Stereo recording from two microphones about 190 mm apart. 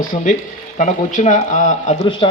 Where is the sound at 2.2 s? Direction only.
30° left (ahead or behind).